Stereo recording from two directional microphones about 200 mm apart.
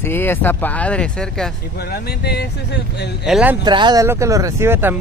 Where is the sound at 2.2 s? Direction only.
55° left (ahead or behind).